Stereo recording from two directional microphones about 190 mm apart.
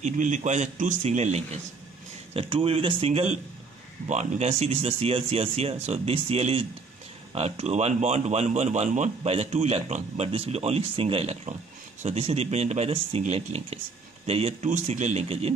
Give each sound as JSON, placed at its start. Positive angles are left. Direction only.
{"t": 0.0, "sound": "speech", "side_deg": -40}